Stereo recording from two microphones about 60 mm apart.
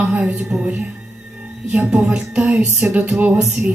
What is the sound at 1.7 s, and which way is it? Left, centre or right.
A woman's voice, centre.